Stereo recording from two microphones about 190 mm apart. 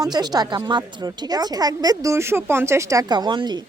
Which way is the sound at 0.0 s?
20° right (ahead or behind).